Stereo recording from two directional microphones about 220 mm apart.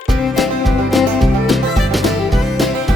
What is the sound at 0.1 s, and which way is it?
Music, centre (ahead or behind).